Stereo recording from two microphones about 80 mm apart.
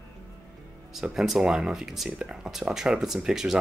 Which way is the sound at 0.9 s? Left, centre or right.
Centre.